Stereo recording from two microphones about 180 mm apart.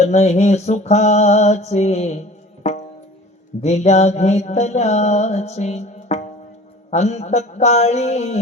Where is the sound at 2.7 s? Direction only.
40° left (ahead or behind).